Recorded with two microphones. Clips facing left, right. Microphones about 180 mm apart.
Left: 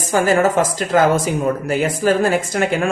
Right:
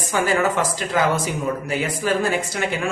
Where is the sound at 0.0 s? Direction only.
45° left (ahead or behind).